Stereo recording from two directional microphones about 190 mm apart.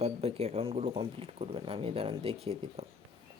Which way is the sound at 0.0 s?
30° right (ahead or behind).